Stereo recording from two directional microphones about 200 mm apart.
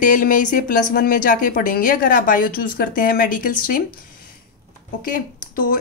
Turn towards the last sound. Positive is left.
turn(degrees=45)  # may be behind; listen again after turning